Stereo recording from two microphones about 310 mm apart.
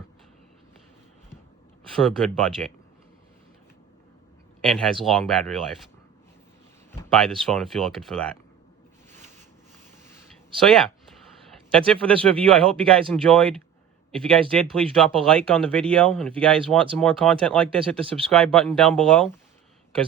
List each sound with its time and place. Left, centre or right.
2.0 s speech: centre
4.6 s speech: centre
7.0 s speech: centre
10.6 s speech: centre
12.0 s speech: centre